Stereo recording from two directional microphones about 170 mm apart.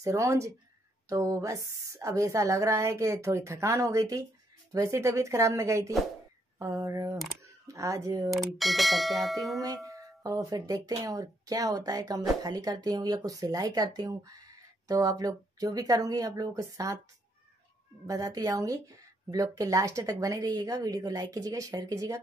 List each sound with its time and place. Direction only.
0.0 s a woman's voice: 20° right (ahead or behind)
8.3 s speech: centre (ahead or behind)
9.8 s speech: 20° right (ahead or behind)
18.0 s speech: 20° right (ahead or behind)